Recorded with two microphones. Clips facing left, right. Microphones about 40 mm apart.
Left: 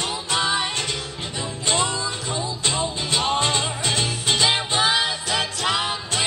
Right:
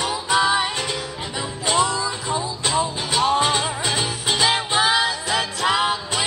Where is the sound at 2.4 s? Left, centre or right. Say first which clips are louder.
Right 2 dB; centre.